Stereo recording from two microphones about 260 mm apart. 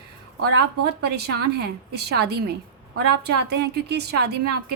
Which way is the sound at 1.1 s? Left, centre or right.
Right.